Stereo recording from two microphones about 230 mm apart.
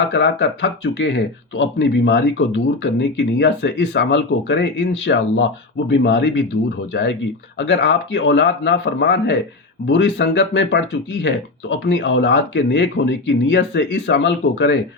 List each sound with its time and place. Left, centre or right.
0.1 s speech: left